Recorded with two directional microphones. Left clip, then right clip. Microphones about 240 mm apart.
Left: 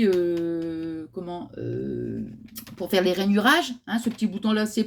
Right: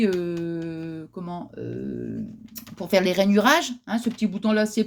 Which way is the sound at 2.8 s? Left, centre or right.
Right.